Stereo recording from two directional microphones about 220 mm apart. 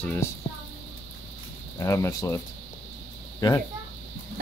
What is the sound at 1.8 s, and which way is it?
Speech, 15° left (ahead or behind).